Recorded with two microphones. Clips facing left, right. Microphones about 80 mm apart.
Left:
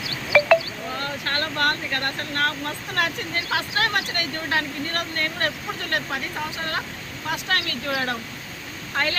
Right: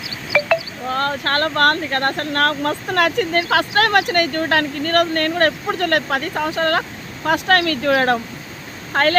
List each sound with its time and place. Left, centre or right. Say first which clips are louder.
0.9 s speech: right 8 dB; right